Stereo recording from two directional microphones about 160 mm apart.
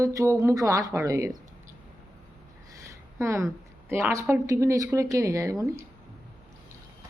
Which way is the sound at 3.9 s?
15° right (ahead or behind).